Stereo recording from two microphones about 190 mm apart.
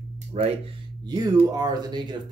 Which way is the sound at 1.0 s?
20° right (ahead or behind).